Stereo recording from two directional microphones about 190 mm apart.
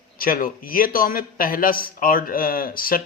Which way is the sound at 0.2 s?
45° left (ahead or behind).